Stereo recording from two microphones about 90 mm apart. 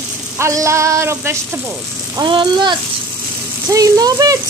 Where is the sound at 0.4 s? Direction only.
35° right (ahead or behind).